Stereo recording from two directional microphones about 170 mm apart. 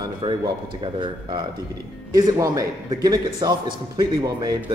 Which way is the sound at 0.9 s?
25° right (ahead or behind).